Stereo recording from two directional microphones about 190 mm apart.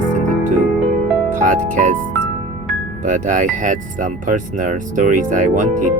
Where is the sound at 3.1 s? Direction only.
45° right (ahead or behind).